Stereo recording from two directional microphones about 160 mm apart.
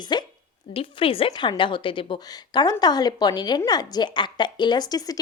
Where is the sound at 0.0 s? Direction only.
30° left (ahead or behind).